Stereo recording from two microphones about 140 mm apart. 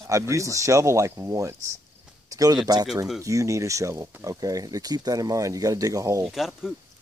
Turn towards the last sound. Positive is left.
turn(degrees=-5)  # may be behind; listen again after turning